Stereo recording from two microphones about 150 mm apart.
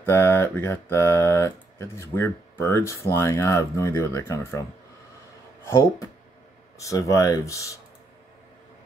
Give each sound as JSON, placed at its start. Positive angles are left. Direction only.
{"t": 0.0, "sound": "speech", "side_deg": 15}
{"t": 6.8, "sound": "speech", "side_deg": 20}